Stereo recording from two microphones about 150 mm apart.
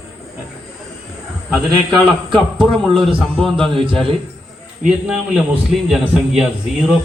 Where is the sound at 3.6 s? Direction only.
35° right (ahead or behind).